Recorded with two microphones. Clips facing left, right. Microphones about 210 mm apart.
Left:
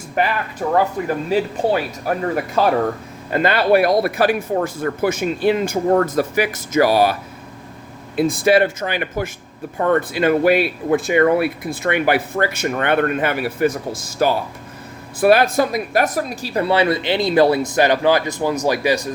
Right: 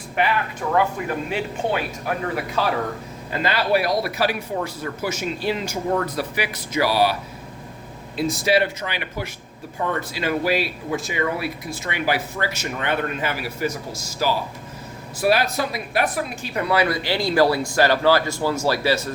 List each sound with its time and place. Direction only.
0.2 s speech: 40° left (ahead or behind); by 19.1 s 15° left (ahead or behind)